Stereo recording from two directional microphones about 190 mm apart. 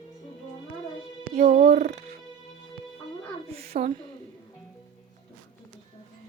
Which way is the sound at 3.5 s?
30° right (ahead or behind).